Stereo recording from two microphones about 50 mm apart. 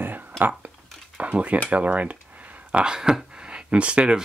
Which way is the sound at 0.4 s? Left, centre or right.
Right.